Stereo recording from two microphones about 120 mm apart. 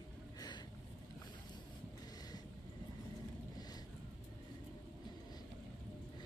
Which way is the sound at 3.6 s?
35° left (ahead or behind).